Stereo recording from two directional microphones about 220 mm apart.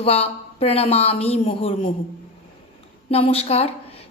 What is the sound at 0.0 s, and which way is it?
A woman's voice, 30° left (ahead or behind).